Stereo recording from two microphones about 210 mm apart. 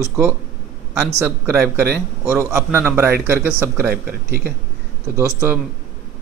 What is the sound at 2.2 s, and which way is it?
A man's voice, 10° right (ahead or behind).